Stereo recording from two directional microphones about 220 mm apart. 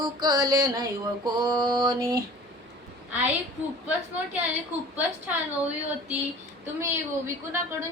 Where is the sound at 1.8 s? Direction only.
15° right (ahead or behind).